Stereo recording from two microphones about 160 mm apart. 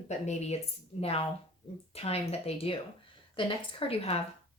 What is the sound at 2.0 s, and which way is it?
A woman's voice, 40° left (ahead or behind).